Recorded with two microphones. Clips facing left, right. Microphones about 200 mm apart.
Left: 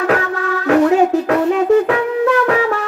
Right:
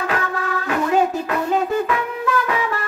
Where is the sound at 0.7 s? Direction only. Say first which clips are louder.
Left 8 dB; 85° left.